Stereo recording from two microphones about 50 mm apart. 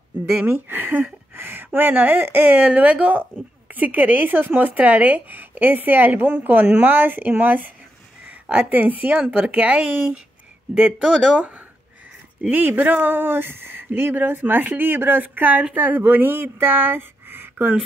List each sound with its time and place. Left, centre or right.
0.5 s speech: right
8.3 s speech: right
12.4 s speech: right